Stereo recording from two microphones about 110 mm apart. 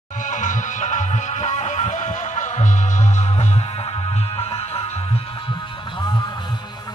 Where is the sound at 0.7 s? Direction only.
90° left.